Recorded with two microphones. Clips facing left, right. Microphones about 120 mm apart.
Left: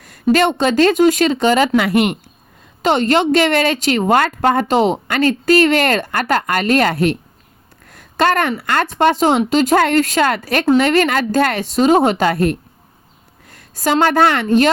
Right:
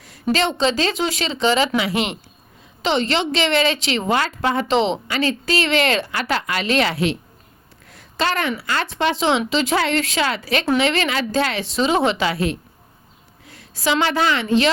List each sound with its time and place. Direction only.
0.0 s a woman's voice: 50° left (ahead or behind)